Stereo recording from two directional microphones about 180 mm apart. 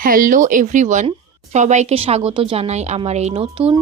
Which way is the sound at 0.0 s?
50° right (ahead or behind).